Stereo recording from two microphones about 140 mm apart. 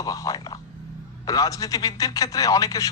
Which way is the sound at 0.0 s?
25° left (ahead or behind).